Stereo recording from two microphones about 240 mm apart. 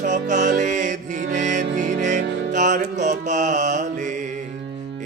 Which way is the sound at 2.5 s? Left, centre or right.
Right.